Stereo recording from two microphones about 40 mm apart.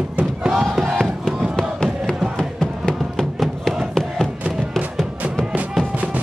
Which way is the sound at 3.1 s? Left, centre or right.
Centre.